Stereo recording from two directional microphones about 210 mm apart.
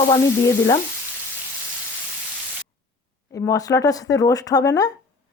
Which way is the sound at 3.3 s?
15° left (ahead or behind).